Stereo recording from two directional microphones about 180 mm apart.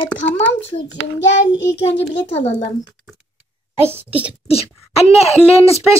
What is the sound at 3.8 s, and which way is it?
Speech, 10° right (ahead or behind).